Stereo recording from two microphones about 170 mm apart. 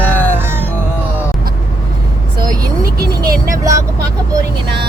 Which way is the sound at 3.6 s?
20° right (ahead or behind).